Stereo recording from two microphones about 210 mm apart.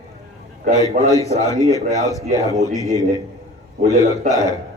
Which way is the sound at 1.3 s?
15° left (ahead or behind).